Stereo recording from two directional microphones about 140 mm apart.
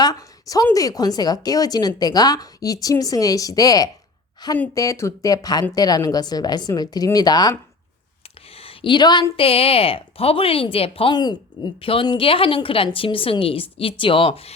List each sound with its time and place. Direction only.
0.0 s a woman's voice: 25° left (ahead or behind)
8.5 s a sound: 40° left (ahead or behind)
9.3 s speech: 45° left (ahead or behind)